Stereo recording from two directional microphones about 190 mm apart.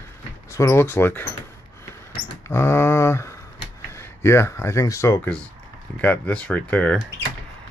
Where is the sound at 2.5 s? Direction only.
15° left (ahead or behind).